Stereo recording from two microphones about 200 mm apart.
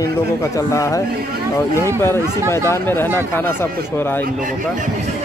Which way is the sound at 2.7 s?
10° left (ahead or behind).